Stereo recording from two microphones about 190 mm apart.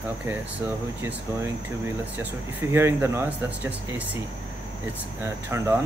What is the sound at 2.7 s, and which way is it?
Speech, 15° right (ahead or behind).